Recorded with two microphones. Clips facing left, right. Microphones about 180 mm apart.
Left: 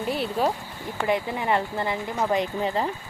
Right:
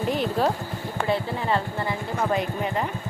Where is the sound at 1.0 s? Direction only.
15° left (ahead or behind).